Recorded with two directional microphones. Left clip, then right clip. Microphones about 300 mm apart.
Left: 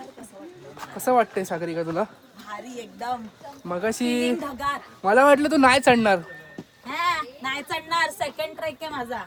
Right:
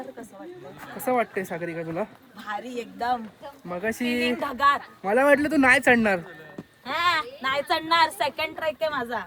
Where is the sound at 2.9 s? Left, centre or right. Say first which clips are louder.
Right 3 dB; right.